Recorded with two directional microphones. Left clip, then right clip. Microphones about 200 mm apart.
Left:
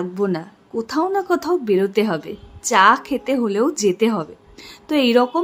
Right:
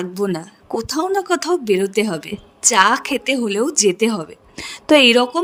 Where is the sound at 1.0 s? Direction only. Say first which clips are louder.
Even; 45° right (ahead or behind).